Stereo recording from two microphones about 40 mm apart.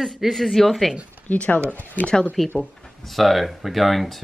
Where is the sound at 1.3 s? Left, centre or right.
Left.